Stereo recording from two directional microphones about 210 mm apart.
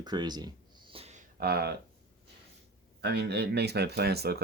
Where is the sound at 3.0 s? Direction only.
50° right (ahead or behind).